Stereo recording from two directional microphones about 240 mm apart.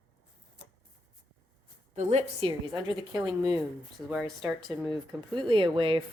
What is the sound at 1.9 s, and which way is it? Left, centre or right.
Speech, right.